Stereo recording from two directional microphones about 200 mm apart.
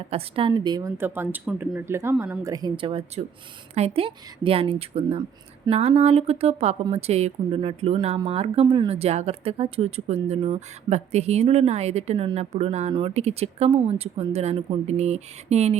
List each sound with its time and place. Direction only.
0.1 s a woman's voice: 30° right (ahead or behind)